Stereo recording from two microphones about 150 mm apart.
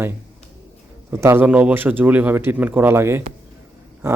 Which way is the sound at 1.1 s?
20° right (ahead or behind).